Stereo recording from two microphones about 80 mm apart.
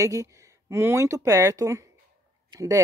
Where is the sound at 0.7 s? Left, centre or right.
Right.